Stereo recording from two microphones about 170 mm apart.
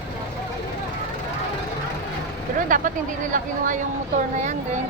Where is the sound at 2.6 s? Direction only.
55° right (ahead or behind).